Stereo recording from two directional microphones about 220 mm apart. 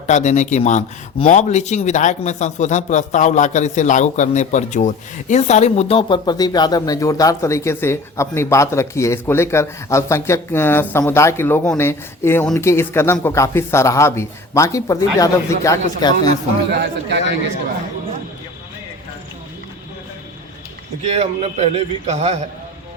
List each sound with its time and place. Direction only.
0.1 s speech: 35° left (ahead or behind)
16.7 s a man's voice: 50° right (ahead or behind)
21.0 s a man's voice: 30° right (ahead or behind)